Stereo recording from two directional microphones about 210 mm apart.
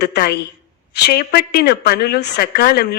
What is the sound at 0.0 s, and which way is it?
Speech, 50° left (ahead or behind).